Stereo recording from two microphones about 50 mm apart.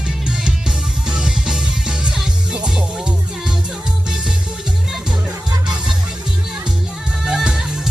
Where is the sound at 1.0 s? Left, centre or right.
Centre.